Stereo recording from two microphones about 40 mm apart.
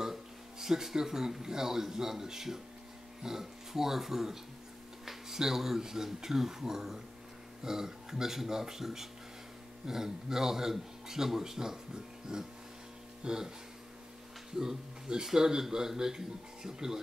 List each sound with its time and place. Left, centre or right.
0.0 s a man's voice: centre
14.6 s a man's voice: centre